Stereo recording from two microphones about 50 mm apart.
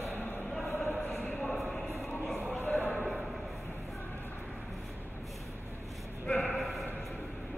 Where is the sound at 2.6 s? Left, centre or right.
Left.